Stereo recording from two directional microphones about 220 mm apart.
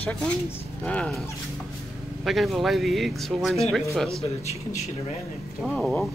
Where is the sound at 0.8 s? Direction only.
5° left (ahead or behind).